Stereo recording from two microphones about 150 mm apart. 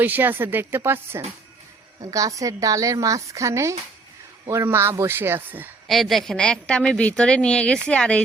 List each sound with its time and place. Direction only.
0.0 s a woman's voice: 10° right (ahead or behind)
5.9 s a woman's voice: centre (ahead or behind)